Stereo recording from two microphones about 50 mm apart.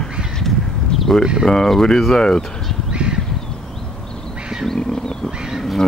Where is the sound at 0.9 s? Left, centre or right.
Centre.